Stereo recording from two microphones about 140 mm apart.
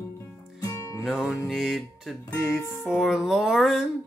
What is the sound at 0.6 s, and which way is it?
Music, 25° left (ahead or behind).